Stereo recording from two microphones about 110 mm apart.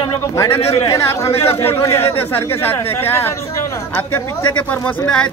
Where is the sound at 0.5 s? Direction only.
65° left (ahead or behind).